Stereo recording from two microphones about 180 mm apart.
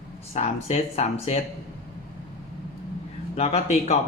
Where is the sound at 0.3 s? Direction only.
35° left (ahead or behind).